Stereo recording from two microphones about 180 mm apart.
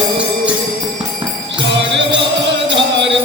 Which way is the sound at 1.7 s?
85° right.